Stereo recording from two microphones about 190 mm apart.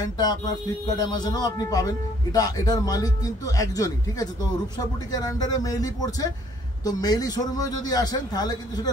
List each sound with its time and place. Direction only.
0.0 s speech: 20° left (ahead or behind)